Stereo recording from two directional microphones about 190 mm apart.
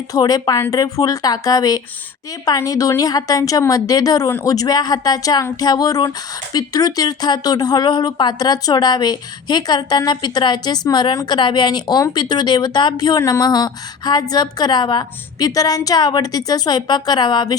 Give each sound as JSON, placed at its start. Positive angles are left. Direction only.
{"t": 0.1, "sound": "speech", "side_deg": 20}